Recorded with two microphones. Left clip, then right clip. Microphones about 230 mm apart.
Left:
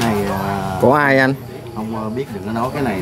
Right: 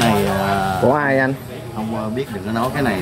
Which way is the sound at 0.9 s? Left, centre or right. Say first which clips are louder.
Left 5 dB; left.